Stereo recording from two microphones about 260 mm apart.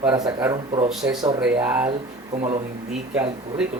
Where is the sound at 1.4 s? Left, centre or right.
Centre.